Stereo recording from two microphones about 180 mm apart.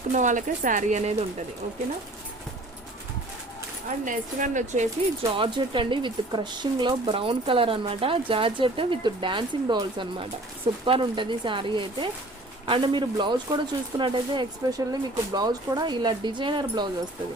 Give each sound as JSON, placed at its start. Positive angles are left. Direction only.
{"t": 0.1, "sound": "speech", "side_deg": -45}
{"t": 3.8, "sound": "speech", "side_deg": -45}
{"t": 5.2, "sound": "speech", "side_deg": -25}